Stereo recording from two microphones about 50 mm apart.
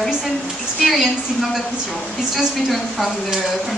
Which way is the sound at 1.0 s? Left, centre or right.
Centre.